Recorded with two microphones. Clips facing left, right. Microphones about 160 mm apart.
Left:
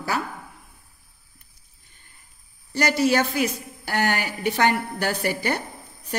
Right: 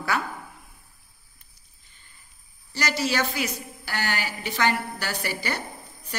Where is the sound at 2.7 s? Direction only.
55° left (ahead or behind).